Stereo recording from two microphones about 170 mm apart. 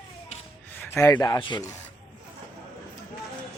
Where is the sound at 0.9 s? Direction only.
15° left (ahead or behind).